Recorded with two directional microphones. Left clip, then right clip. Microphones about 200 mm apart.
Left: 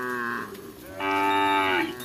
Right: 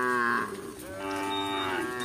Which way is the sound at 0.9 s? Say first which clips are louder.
Left 9 dB; 5° left (ahead or behind).